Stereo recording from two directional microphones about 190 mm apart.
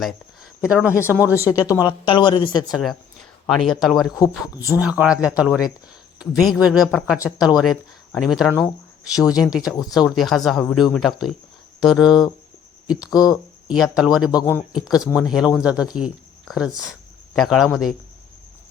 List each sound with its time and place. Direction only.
0.6 s speech: 5° right (ahead or behind)
1.7 s speech: 20° left (ahead or behind)
2.7 s speech: centre (ahead or behind)
14.3 s speech: 20° left (ahead or behind)
14.7 s speech: centre (ahead or behind)